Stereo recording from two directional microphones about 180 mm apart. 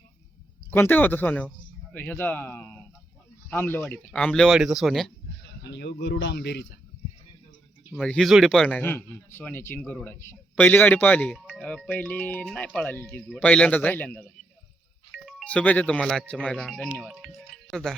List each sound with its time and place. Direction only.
0.7 s speech: 10° left (ahead or behind)
5.4 s speech: 70° left (ahead or behind)
7.9 s speech: 5° left (ahead or behind)
11.3 s speech: centre (ahead or behind)
11.9 s speech: 10° left (ahead or behind)
15.1 s speech: centre (ahead or behind)